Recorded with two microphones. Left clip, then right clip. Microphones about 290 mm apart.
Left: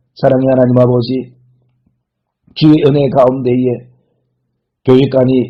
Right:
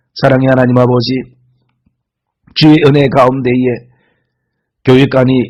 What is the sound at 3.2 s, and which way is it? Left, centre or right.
Speech, right.